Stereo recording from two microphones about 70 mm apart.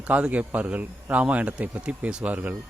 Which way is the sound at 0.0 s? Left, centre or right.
Right.